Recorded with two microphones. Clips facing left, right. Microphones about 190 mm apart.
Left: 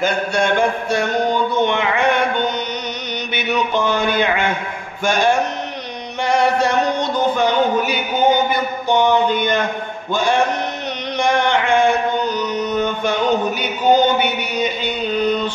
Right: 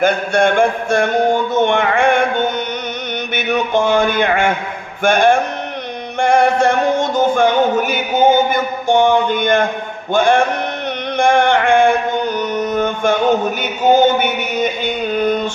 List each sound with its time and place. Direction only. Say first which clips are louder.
0.0 s a man's voice: right 4 dB; 55° right (ahead or behind)
5.0 s music: right 4 dB; 55° right (ahead or behind)
6.2 s a sound: right 4 dB; 50° right (ahead or behind)
10.1 s a man's voice: right 5 dB; 55° right (ahead or behind)
11.1 s a sound: right 4 dB; 50° right (ahead or behind)
13.9 s a man's voice: right 3 dB; 50° right (ahead or behind)